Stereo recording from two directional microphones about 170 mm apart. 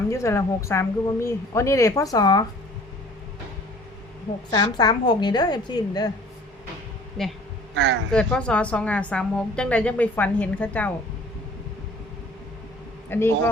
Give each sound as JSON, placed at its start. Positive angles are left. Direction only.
{"t": 0.1, "sound": "a woman's voice", "side_deg": 15}
{"t": 4.5, "sound": "a woman's voice", "side_deg": 25}
{"t": 7.2, "sound": "a man's voice", "side_deg": 0}
{"t": 7.8, "sound": "a woman's voice", "side_deg": -90}
{"t": 8.1, "sound": "a woman's voice", "side_deg": 5}
{"t": 13.1, "sound": "a man's voice", "side_deg": 15}